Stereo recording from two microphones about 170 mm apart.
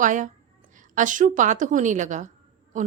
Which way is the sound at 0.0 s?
50° right (ahead or behind).